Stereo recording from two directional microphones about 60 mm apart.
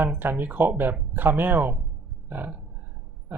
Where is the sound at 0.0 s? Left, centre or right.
Right.